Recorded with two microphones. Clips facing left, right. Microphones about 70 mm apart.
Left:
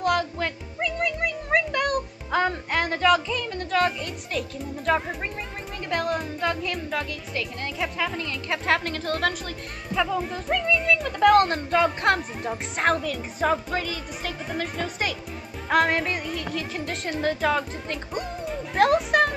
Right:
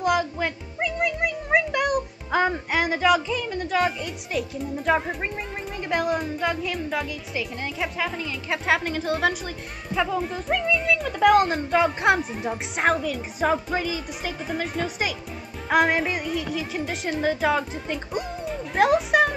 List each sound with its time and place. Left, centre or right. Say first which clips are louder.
0.0 s music: right 1 dB; centre
5.8 s a woman's voice: right 2 dB; centre
15.7 s music: right 1 dB; centre
16.4 s a woman's voice: right 2 dB; centre